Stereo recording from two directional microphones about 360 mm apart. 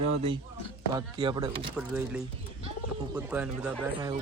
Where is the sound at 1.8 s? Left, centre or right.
Centre.